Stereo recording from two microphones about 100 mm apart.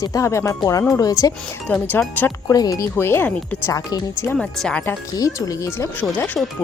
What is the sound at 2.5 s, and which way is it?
Speech, 40° left (ahead or behind).